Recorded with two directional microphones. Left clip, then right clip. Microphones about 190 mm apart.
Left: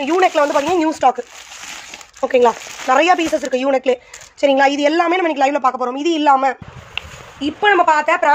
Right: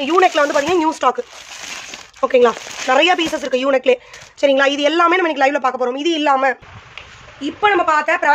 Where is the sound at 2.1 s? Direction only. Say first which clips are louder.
Even; 10° right (ahead or behind).